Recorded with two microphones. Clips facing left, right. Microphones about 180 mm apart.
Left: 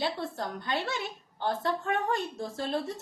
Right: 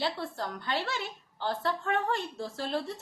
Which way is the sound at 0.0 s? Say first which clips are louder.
Left 1 dB; 20° left (ahead or behind).